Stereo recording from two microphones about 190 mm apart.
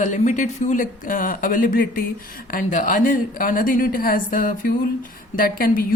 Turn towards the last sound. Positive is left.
turn(degrees=50)  # may be behind; listen again after turning